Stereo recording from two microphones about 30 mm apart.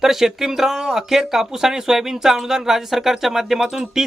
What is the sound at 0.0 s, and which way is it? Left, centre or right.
Speech, centre.